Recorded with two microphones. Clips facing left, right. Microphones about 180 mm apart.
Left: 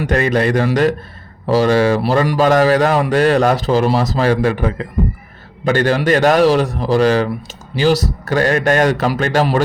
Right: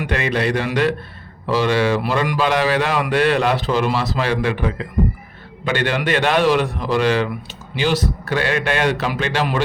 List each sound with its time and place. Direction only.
0.0 s a man's voice: 45° left (ahead or behind)